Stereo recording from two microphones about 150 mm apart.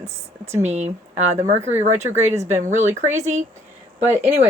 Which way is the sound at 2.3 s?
20° right (ahead or behind).